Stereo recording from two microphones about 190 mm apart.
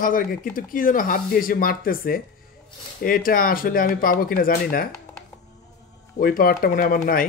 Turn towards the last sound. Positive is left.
turn(degrees=50)  # may be behind; listen again after turning